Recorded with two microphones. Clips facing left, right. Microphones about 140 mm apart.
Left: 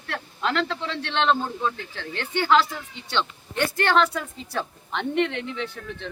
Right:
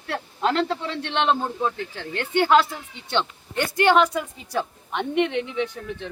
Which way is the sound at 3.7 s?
15° right (ahead or behind).